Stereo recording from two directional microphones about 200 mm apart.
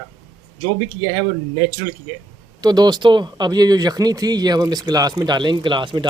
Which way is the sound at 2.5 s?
20° right (ahead or behind).